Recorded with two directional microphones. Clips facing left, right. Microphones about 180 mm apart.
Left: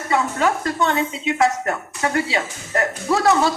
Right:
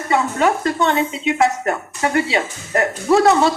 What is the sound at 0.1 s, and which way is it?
Speech, 25° right (ahead or behind).